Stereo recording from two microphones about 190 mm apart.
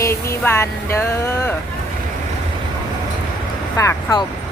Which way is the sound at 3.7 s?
20° left (ahead or behind).